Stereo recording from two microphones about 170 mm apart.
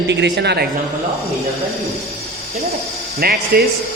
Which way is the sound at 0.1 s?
85° right.